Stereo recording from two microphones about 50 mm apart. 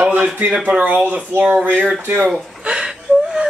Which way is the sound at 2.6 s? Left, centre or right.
Centre.